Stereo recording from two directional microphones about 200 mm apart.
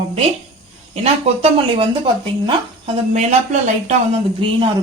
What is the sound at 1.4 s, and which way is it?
Speech, 30° right (ahead or behind).